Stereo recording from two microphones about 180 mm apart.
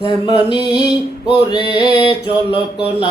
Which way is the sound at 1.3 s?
30° right (ahead or behind).